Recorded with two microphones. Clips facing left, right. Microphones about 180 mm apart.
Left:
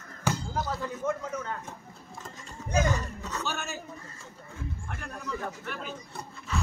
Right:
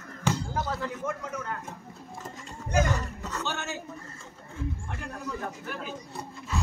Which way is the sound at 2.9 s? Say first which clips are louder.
Even; 15° left (ahead or behind).